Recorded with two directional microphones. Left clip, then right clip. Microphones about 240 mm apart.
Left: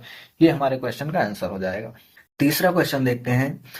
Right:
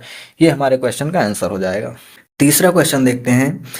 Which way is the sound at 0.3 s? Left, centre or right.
Right.